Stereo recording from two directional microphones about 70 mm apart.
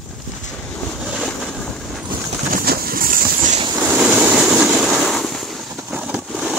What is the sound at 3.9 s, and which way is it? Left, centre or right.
Vehicle, centre.